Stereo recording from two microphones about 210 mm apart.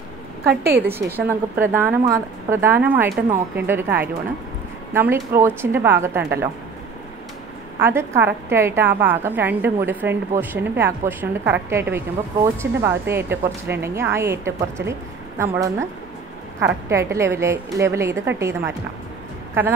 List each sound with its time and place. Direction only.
0.7 s a woman's voice: 10° right (ahead or behind)
7.8 s a woman's voice: 10° right (ahead or behind)